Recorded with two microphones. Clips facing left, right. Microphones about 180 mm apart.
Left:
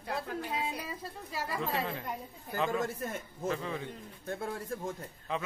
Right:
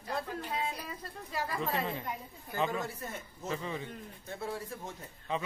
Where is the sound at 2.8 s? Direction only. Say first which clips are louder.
Left 4 dB; 50° left (ahead or behind).